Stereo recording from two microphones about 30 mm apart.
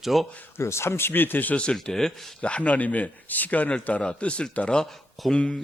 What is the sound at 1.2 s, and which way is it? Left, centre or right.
Speech, left.